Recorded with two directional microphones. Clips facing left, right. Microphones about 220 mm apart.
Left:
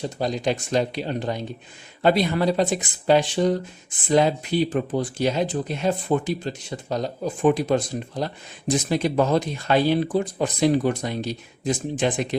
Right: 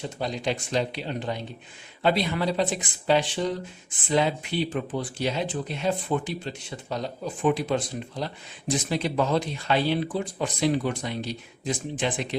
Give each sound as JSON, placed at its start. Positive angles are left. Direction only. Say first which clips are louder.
{"t": 0.2, "sound": "speech", "louder": "left 4 dB", "side_deg": 40}